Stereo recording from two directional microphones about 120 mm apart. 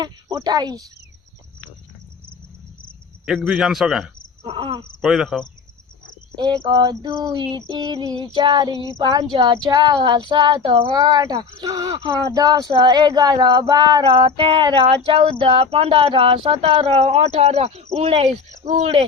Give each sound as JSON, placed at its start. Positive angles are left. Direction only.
{"t": 0.0, "sound": "female singing", "side_deg": -35}
{"t": 3.2, "sound": "speech", "side_deg": -5}
{"t": 4.4, "sound": "speech", "side_deg": -45}
{"t": 5.0, "sound": "speech", "side_deg": -5}
{"t": 6.6, "sound": "female singing", "side_deg": -35}
{"t": 10.9, "sound": "speech", "side_deg": -35}